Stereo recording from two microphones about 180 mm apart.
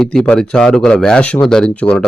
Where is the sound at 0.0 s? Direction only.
5° left (ahead or behind).